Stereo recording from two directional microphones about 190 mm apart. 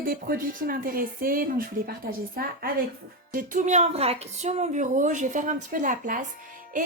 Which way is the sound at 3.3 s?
45° right (ahead or behind).